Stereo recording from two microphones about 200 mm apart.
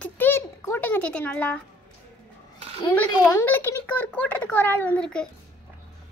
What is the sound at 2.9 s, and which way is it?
A child's voice, 10° left (ahead or behind).